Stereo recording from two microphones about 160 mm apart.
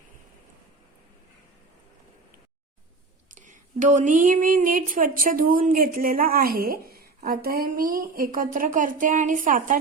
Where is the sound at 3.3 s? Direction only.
50° right (ahead or behind).